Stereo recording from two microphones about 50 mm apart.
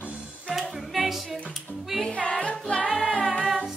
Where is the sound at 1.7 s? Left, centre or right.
Right.